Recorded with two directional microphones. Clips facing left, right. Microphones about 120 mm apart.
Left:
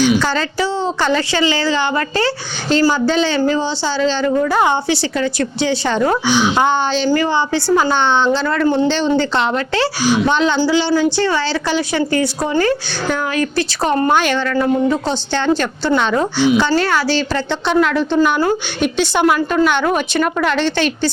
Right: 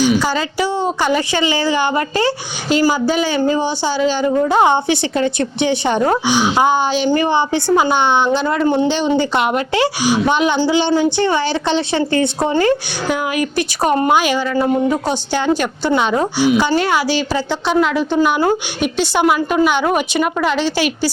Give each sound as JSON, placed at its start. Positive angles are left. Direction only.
{"t": 0.2, "sound": "a woman's voice", "side_deg": -10}